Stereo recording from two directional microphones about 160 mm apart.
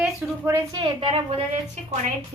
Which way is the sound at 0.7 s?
30° right (ahead or behind).